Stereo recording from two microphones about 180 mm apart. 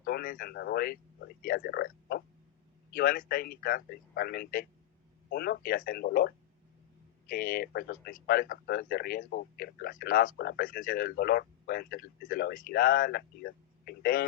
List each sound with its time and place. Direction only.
0.0 s a man's voice: 55° left (ahead or behind)